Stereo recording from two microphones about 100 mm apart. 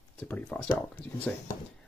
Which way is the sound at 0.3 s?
15° left (ahead or behind).